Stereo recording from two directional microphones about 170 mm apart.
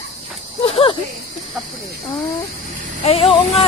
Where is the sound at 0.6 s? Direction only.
35° left (ahead or behind).